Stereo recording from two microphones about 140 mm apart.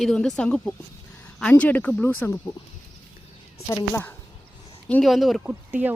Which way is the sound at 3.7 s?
15° left (ahead or behind).